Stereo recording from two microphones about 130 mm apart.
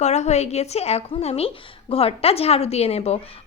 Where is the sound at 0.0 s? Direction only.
60° left (ahead or behind).